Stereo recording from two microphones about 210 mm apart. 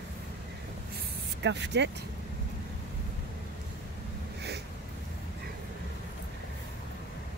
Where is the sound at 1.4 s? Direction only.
55° right (ahead or behind).